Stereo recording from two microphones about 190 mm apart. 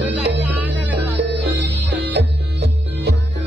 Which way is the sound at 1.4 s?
60° right (ahead or behind).